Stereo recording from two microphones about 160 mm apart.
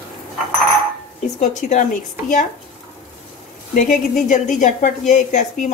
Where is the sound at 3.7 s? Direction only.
50° left (ahead or behind).